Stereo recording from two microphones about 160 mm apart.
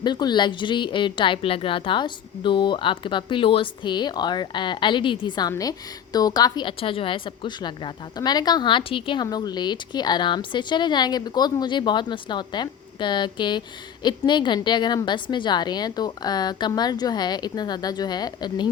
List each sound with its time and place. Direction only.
0.0 s a woman's voice: 25° left (ahead or behind)